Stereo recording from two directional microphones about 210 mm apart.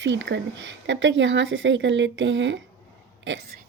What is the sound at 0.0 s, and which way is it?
A woman's voice, 60° right (ahead or behind).